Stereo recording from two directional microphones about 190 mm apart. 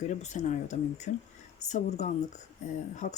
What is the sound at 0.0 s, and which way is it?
Speech, 40° left (ahead or behind).